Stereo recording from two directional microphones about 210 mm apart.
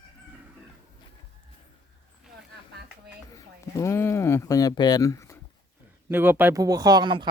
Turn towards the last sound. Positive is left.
turn(degrees=-20)  # may be behind; listen again after turning